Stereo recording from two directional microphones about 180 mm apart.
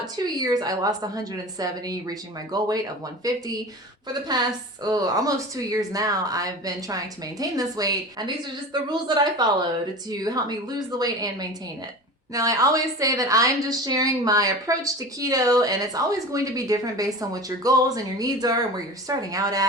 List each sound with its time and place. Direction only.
0.0 s a woman's voice: 20° right (ahead or behind)